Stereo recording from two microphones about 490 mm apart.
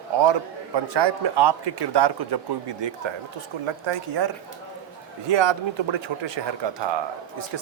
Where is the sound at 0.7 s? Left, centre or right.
Right.